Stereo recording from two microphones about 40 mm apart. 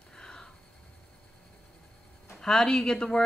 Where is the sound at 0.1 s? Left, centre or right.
Centre.